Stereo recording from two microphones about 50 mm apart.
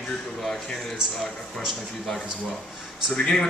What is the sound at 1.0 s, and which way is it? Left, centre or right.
Speech, centre.